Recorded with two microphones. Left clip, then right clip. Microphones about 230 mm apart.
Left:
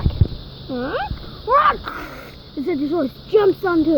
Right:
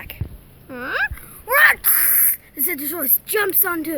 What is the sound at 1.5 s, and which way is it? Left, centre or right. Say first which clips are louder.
Speech: right 1 dB; right.